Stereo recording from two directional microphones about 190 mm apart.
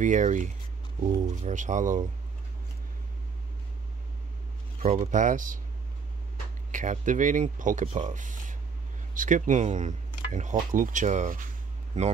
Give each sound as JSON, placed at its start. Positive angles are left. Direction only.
{"t": 0.0, "sound": "speech", "side_deg": -40}
{"t": 4.7, "sound": "speech", "side_deg": -35}
{"t": 6.7, "sound": "speech", "side_deg": -40}